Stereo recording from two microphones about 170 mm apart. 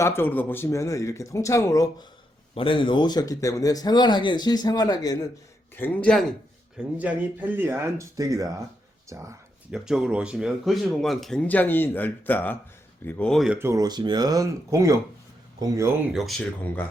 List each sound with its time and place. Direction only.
0.0 s speech: 15° left (ahead or behind)
5.7 s speech: 10° left (ahead or behind)
6.7 s speech: 10° right (ahead or behind)
9.7 s speech: 5° right (ahead or behind)
13.6 s speech: 20° right (ahead or behind)
16.1 s speech: centre (ahead or behind)